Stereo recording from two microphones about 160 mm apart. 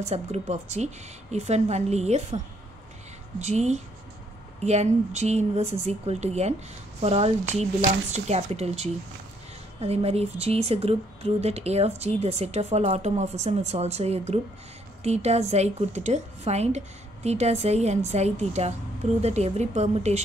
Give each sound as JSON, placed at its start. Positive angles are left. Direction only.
{"t": 0.0, "sound": "a woman's voice", "side_deg": -45}